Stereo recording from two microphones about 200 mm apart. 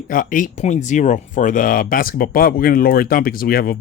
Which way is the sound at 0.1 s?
40° left (ahead or behind).